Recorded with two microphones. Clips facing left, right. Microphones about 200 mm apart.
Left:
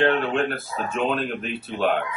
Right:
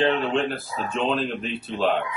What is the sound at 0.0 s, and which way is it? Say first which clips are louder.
Speech: left 1 dB; centre (ahead or behind).